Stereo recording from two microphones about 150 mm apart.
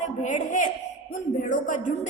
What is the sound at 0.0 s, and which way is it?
A man's voice, 55° left (ahead or behind).